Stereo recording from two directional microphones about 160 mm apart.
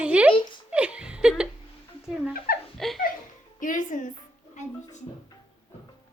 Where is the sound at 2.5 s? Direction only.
70° left (ahead or behind).